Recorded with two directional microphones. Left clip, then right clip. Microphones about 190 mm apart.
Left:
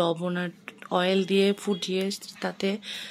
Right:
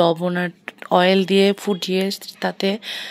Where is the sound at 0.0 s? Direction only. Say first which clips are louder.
Right 9 dB; 25° right (ahead or behind).